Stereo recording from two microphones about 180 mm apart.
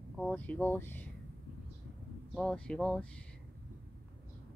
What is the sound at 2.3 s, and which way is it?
Speech, 5° left (ahead or behind).